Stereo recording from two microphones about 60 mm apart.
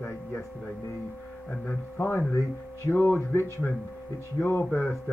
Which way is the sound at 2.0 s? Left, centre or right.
Left.